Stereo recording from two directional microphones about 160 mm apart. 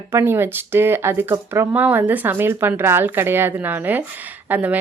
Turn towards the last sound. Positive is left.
turn(degrees=-10)  # may be behind; listen again after turning